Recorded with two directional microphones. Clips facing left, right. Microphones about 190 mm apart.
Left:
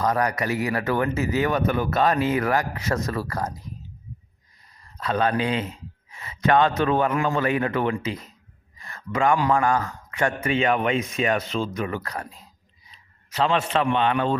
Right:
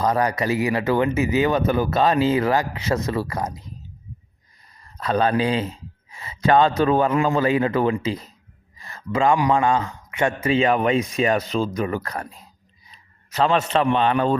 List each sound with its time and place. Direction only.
0.0 s speech: 25° right (ahead or behind)
4.9 s a man's voice: 35° right (ahead or behind)
8.8 s a sound: 30° right (ahead or behind)
9.3 s a man's voice: 15° right (ahead or behind); by 14.3 s 35° right (ahead or behind)